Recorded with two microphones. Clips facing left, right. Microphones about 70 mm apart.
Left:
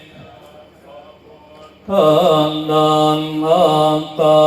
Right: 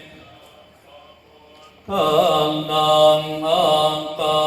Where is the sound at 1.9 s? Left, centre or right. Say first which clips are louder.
Left 5 dB; centre.